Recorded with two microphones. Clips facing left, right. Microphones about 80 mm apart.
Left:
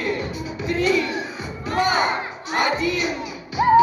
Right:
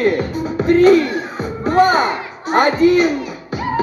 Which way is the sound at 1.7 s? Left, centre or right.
Right.